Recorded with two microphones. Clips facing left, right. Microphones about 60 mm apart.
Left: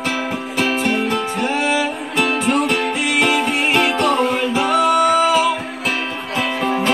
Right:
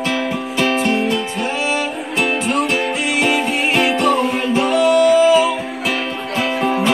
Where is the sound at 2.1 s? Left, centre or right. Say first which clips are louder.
Left 1 dB; centre.